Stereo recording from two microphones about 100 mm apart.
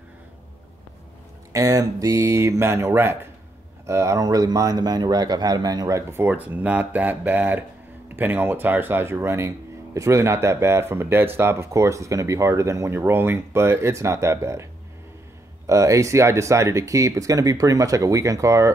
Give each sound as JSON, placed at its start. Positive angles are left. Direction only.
{"t": 1.5, "sound": "speech", "side_deg": -35}
{"t": 6.2, "sound": "speech", "side_deg": -15}